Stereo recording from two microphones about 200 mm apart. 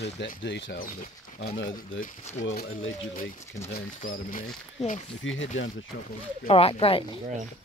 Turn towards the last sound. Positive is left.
turn(degrees=30)  # may be behind; listen again after turning